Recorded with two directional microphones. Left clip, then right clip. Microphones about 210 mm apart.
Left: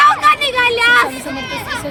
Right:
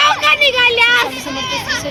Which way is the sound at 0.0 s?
60° left (ahead or behind).